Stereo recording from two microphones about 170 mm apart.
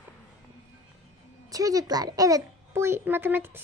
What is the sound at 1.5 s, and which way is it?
A child's voice, 20° right (ahead or behind).